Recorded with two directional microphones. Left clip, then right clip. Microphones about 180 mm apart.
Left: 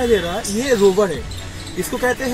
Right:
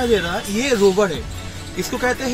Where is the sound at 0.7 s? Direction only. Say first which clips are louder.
Left 2 dB; 15° right (ahead or behind).